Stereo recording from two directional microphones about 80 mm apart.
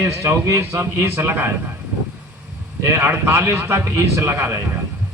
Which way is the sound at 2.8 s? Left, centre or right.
Right.